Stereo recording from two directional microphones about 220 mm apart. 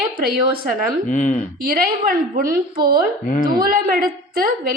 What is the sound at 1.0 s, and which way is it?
Speech, 35° left (ahead or behind).